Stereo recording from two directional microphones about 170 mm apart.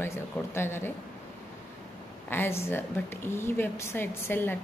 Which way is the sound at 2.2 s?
15° left (ahead or behind).